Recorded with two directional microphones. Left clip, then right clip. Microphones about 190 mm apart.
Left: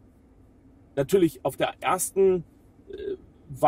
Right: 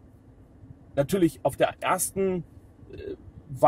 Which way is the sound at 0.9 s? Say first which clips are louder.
Left 2 dB; 10° right (ahead or behind).